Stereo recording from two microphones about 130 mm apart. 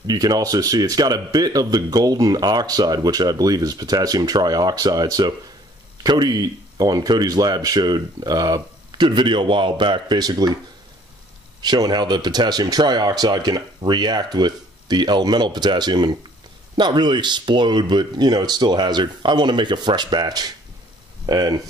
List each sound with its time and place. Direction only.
0.0 s speech: 30° right (ahead or behind)
11.6 s speech: 30° right (ahead or behind)